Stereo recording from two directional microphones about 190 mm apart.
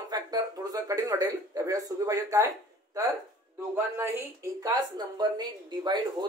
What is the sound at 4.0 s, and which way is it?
A woman's voice, 15° right (ahead or behind).